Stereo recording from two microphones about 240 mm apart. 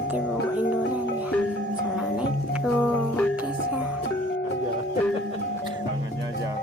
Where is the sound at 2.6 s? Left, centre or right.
Centre.